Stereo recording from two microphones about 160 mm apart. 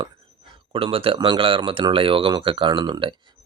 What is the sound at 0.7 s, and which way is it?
Speech, 35° right (ahead or behind).